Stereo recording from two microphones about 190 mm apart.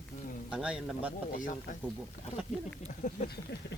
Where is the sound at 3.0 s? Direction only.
40° left (ahead or behind).